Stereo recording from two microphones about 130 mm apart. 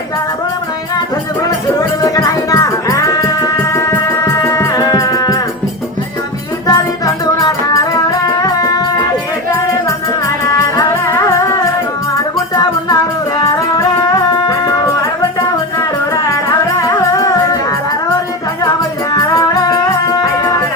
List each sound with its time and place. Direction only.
2.0 s music: 30° left (ahead or behind)
6.7 s music: 30° left (ahead or behind)
10.2 s music: 25° left (ahead or behind)
13.4 s music: 25° left (ahead or behind)
19.1 s music: 30° left (ahead or behind)